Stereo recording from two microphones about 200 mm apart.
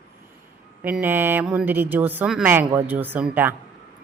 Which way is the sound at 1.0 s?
10° right (ahead or behind).